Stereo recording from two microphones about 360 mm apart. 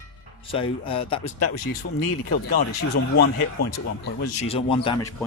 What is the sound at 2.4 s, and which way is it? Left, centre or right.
Speech, left.